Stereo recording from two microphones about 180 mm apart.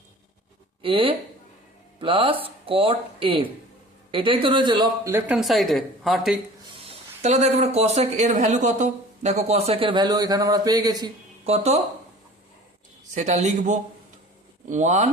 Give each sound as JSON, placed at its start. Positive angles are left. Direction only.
{"t": 0.8, "sound": "speech", "side_deg": -30}
{"t": 6.7, "sound": "speech", "side_deg": -35}
{"t": 11.4, "sound": "speech", "side_deg": -35}
{"t": 13.1, "sound": "speech", "side_deg": -40}